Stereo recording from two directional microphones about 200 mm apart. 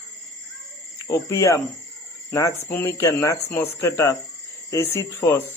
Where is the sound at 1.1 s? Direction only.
15° left (ahead or behind).